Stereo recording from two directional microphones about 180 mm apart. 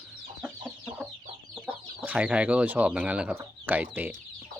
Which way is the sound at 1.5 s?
5° right (ahead or behind).